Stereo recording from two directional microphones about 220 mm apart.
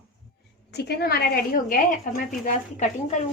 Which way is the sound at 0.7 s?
45° left (ahead or behind).